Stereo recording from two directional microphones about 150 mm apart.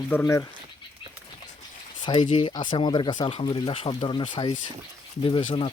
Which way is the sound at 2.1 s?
30° left (ahead or behind).